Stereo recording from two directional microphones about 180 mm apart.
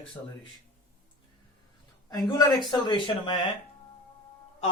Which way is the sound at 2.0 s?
20° left (ahead or behind).